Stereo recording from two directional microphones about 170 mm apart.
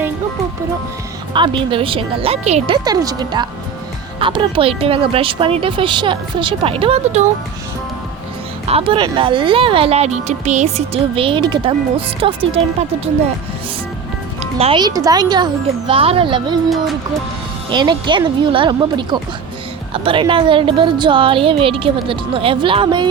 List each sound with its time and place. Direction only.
1.3 s speech: 30° right (ahead or behind)
2.8 s speech: 20° right (ahead or behind); by 7.3 s 40° right (ahead or behind)
8.6 s speech: 35° right (ahead or behind)
14.6 s speech: 30° right (ahead or behind)
16.6 s speech: centre (ahead or behind)
17.7 s speech: 25° right (ahead or behind)